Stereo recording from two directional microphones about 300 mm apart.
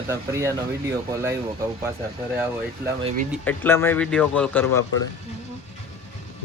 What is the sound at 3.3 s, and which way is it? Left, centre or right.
Speech, centre.